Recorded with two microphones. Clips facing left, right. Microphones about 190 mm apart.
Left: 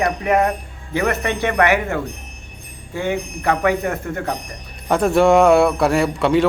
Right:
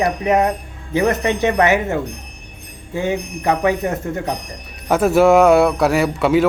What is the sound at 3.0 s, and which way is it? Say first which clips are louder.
Speech: right 1 dB; 15° right (ahead or behind).